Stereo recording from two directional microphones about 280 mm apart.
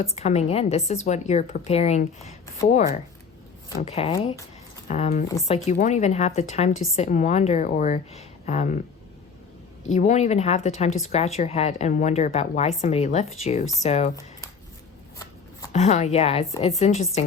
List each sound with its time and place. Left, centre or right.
0.0 s a woman's voice: left
3.7 s a woman's voice: left
9.9 s a woman's voice: left
15.7 s a woman's voice: left